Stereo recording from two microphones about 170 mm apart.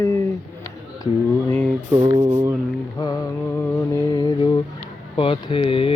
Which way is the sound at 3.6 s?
10° left (ahead or behind).